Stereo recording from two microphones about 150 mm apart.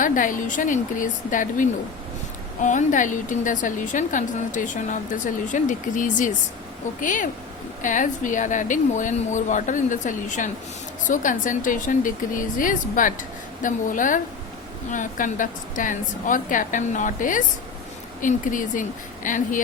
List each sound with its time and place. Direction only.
0.0 s a woman's voice: 60° left (ahead or behind)